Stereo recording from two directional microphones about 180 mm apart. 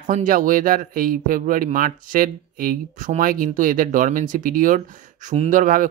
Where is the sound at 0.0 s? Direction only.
45° right (ahead or behind).